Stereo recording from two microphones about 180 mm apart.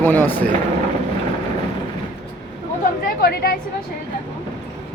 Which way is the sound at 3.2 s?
60° left (ahead or behind).